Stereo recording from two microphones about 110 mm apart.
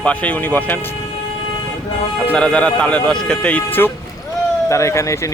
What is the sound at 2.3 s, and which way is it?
Speech, 10° left (ahead or behind).